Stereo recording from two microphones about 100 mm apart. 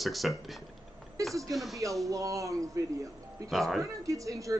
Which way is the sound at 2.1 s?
35° right (ahead or behind).